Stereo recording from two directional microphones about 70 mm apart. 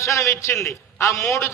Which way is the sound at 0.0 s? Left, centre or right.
Left.